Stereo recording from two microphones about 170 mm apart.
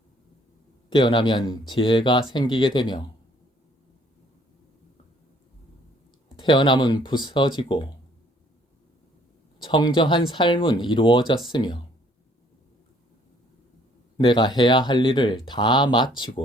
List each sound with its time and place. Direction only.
0.9 s speech: 30° left (ahead or behind)
6.3 s speech: 30° left (ahead or behind)
9.6 s speech: 30° left (ahead or behind)
14.2 s speech: 30° left (ahead or behind)